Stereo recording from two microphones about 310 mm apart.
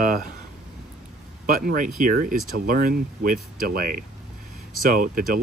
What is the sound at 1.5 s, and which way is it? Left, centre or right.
Speech, right.